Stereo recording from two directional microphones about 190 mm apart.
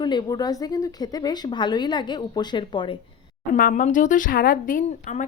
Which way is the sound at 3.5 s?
45° left (ahead or behind).